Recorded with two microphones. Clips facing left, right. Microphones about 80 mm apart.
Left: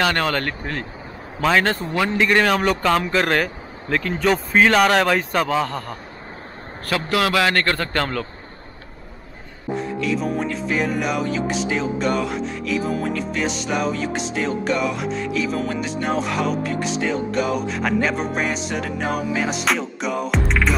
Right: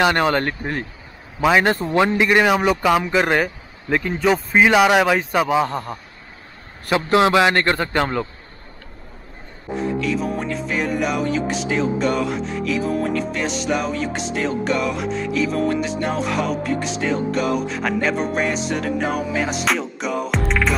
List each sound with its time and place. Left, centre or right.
0.0 s a man's voice: centre
1.8 s a man's voice: right
2.1 s a man's voice: centre
6.9 s a man's voice: right
9.7 s music: centre